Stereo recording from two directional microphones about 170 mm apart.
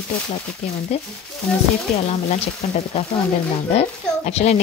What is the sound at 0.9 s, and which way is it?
A woman's voice, 35° left (ahead or behind).